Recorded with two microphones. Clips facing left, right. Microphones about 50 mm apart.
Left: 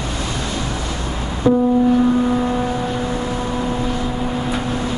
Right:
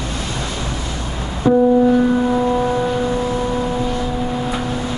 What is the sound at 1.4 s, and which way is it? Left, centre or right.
Music, centre.